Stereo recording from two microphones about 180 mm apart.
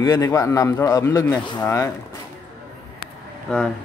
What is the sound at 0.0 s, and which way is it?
A man's voice, 15° left (ahead or behind).